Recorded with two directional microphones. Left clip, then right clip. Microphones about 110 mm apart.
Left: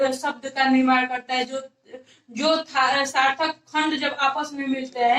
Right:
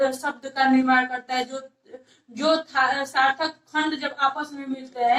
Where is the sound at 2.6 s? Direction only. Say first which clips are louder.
Left 2 dB; 15° left (ahead or behind).